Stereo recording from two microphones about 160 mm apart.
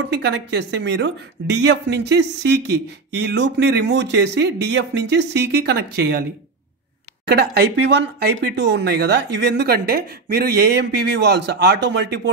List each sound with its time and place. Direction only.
0.0 s speech: 90° right
7.2 s speech: 90° right